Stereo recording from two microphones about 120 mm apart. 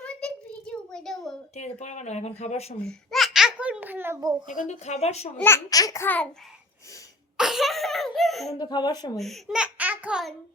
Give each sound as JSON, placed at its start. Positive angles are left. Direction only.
{"t": 0.0, "sound": "a sound", "side_deg": 10}
{"t": 1.5, "sound": "speech", "side_deg": 75}
{"t": 2.8, "sound": "babbling", "side_deg": 0}
{"t": 4.2, "sound": "a child's voice", "side_deg": -30}
{"t": 4.4, "sound": "speech", "side_deg": 90}
{"t": 5.4, "sound": "a child's voice", "side_deg": 20}
{"t": 7.3, "sound": "a sound", "side_deg": -5}
{"t": 8.5, "sound": "speech", "side_deg": 35}
{"t": 9.1, "sound": "a child's voice", "side_deg": 0}
{"t": 9.6, "sound": "baby laughter", "side_deg": -10}